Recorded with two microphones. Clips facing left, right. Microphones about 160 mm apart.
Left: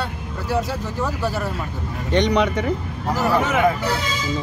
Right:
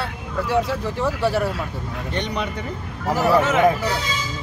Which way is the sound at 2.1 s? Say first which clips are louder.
Left 9 dB; 90° left.